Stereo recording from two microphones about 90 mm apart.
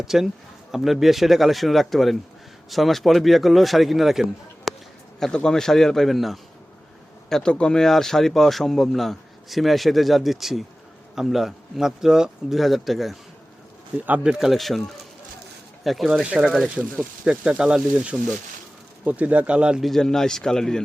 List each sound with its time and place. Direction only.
0.0 s speech: 5° right (ahead or behind)
5.2 s speech: 10° left (ahead or behind)
14.0 s speech: 20° right (ahead or behind)
14.3 s speech: centre (ahead or behind)
19.8 s speech: 5° left (ahead or behind)